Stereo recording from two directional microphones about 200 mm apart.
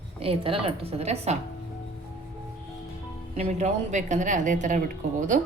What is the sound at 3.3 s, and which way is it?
A woman's voice, 35° right (ahead or behind).